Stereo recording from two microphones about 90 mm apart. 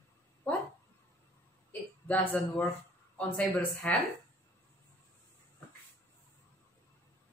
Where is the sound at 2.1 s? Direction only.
20° left (ahead or behind).